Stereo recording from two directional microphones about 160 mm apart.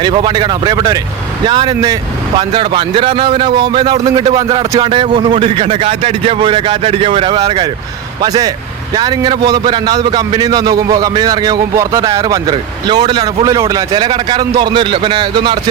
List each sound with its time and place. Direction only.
0.0 s a man's voice: 30° right (ahead or behind)